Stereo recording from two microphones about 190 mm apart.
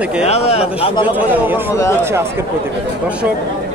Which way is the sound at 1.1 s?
10° right (ahead or behind).